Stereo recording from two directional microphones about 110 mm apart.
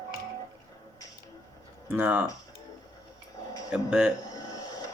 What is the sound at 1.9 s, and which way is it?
Speech, 15° right (ahead or behind).